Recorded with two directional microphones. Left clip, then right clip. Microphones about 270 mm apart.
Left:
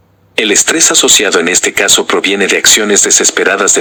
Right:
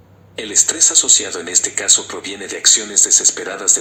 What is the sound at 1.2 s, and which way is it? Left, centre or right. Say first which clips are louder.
Speech: left 11 dB; left.